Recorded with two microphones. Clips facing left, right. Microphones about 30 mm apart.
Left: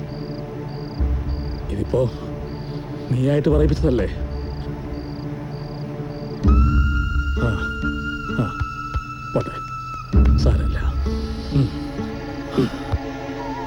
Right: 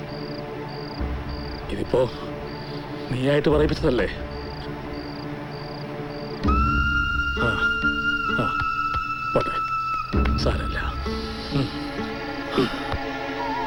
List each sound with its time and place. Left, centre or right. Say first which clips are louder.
1.8 s speech: left 1 dB; right
3.1 s speech: left 1 dB; right
6.4 s music: right 1 dB; right